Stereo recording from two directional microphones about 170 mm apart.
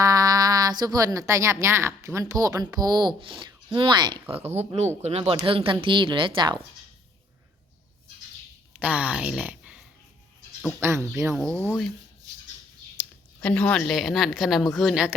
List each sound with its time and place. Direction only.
0.0 s a sound: 20° right (ahead or behind)
1.3 s speech: 15° right (ahead or behind)
4.4 s speech: 40° right (ahead or behind)
8.8 s speech: 5° right (ahead or behind)
11.4 s speech: 10° left (ahead or behind)
13.4 s a woman's voice: 10° left (ahead or behind)